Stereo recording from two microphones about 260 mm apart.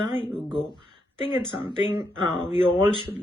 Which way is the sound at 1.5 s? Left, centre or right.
Centre.